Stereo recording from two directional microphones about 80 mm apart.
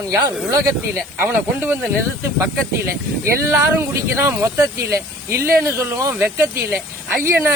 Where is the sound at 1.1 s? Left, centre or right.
Right.